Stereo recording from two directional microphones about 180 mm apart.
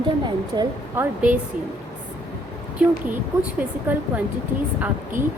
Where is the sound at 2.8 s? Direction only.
5° right (ahead or behind).